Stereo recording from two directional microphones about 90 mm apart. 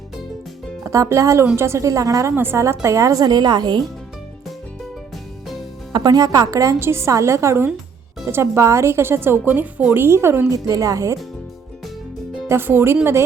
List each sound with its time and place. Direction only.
0.9 s a woman's voice: 35° right (ahead or behind)
2.3 s a woman's voice: 25° right (ahead or behind)
2.8 s speech: 35° right (ahead or behind); by 3.8 s 50° right (ahead or behind)
5.9 s speech: 45° right (ahead or behind)
6.7 s a woman's voice: 30° right (ahead or behind)
10.5 s a woman's voice: 40° right (ahead or behind)
12.5 s a woman's voice: 25° right (ahead or behind)